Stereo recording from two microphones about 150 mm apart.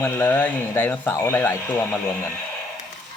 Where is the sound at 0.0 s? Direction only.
10° left (ahead or behind).